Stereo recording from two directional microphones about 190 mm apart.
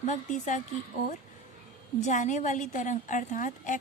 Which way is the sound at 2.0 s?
40° left (ahead or behind).